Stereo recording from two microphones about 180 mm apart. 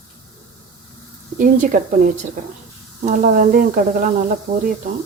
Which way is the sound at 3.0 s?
45° right (ahead or behind).